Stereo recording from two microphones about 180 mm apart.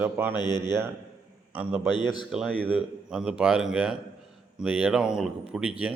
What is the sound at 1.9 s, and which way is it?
Speech, 25° left (ahead or behind).